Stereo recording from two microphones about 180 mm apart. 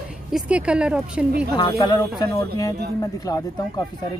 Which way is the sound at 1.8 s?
20° left (ahead or behind).